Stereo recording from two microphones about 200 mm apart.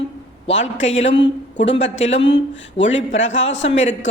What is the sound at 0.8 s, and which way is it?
A man's voice, 70° left (ahead or behind).